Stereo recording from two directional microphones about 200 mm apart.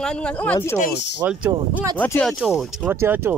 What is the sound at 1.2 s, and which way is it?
Speech, 5° right (ahead or behind).